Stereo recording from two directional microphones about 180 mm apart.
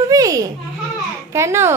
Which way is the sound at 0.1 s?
20° right (ahead or behind).